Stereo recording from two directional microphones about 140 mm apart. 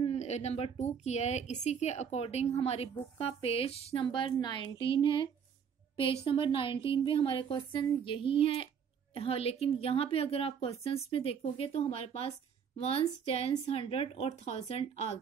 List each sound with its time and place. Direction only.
0.0 s a woman's voice: 50° left (ahead or behind)